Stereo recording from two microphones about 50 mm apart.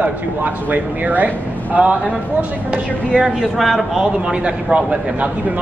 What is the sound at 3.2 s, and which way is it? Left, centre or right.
Speech, centre.